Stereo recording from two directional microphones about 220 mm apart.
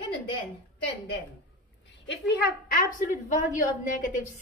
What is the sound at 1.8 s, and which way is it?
A woman's voice, 50° left (ahead or behind).